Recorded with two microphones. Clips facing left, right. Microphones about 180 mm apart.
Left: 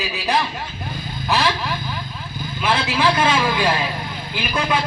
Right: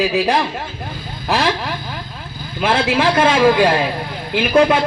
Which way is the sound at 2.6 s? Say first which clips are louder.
Right 4 dB; 50° right (ahead or behind).